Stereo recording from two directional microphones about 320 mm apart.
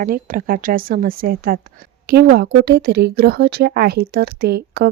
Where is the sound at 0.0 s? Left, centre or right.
Right.